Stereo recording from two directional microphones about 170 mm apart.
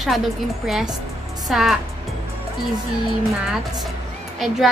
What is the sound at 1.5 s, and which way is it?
Speech, centre (ahead or behind).